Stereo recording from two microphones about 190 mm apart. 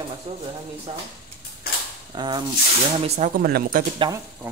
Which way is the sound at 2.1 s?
20° right (ahead or behind).